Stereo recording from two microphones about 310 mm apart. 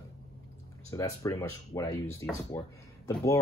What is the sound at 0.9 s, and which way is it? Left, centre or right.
Speech, centre.